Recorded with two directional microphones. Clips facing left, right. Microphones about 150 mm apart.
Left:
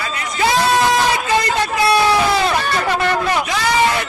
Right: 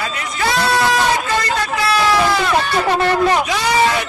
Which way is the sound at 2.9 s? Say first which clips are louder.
Right 4 dB; 35° right (ahead or behind).